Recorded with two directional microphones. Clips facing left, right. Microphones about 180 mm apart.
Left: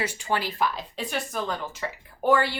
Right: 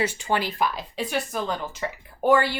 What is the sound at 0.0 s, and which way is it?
A woman's voice, 20° right (ahead or behind).